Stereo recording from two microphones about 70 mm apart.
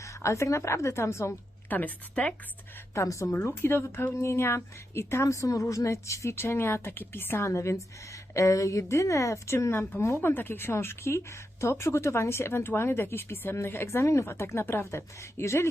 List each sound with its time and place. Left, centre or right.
0.0 s a woman's voice: left
1.7 s speech: left
2.9 s a woman's voice: left
3.4 s a woman's voice: left